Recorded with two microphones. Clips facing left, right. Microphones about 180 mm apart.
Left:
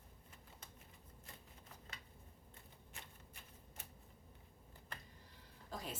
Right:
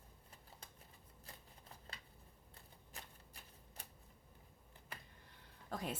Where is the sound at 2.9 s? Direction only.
35° right (ahead or behind).